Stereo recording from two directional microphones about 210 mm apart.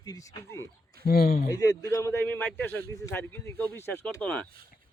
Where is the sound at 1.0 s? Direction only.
45° left (ahead or behind).